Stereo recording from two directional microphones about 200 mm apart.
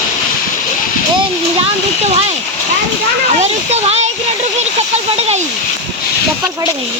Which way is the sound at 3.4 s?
35° right (ahead or behind).